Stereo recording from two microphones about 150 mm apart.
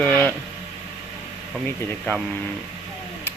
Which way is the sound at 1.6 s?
10° left (ahead or behind).